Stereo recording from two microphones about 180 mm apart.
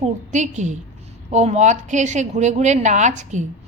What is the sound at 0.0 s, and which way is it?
A woman's voice, 40° right (ahead or behind).